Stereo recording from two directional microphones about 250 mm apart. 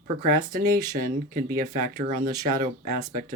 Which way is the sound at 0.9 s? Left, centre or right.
Right.